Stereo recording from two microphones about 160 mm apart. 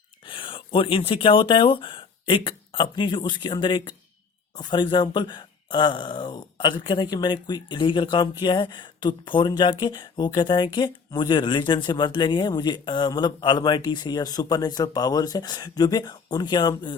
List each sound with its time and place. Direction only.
0.3 s speech: 35° left (ahead or behind)